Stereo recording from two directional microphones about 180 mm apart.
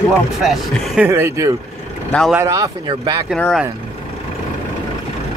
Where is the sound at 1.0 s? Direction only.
15° right (ahead or behind).